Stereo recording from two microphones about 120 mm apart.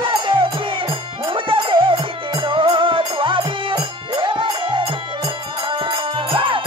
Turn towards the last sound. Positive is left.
turn(degrees=-45)  # may be behind; listen again after turning